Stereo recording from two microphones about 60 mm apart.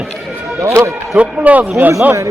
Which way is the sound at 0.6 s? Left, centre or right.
Right.